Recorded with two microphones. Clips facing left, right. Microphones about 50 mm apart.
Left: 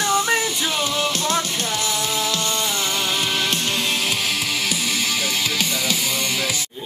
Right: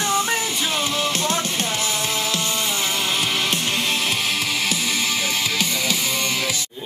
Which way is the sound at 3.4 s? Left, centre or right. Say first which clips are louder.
Even; centre.